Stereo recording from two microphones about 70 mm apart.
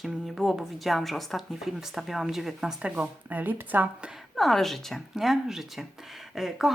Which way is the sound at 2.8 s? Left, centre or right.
Centre.